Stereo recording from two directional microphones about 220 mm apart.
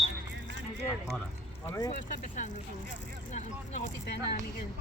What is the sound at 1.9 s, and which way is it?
Speech, 35° left (ahead or behind).